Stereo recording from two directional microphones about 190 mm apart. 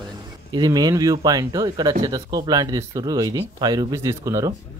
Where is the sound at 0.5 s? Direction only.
20° right (ahead or behind).